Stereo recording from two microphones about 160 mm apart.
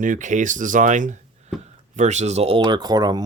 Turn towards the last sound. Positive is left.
turn(degrees=-25)  # may be behind; listen again after turning